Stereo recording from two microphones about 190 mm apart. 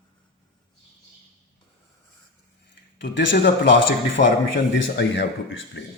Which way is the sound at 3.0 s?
65° left (ahead or behind).